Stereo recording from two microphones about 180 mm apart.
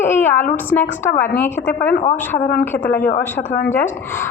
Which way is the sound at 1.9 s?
50° left (ahead or behind).